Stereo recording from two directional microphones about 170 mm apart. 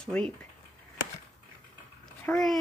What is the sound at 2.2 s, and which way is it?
Speech, centre (ahead or behind).